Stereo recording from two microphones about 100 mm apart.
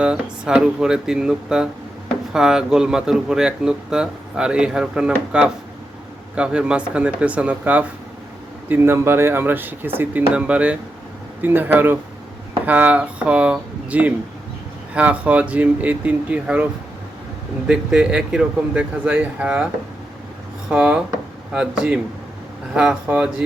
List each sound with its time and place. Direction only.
0.0 s speech: 10° right (ahead or behind)
17.7 s speech: 10° right (ahead or behind)
20.7 s speech: 10° right (ahead or behind)